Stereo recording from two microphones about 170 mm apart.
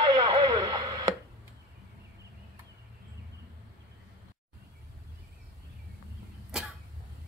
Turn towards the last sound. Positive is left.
turn(degrees=-5)  # may be behind; listen again after turning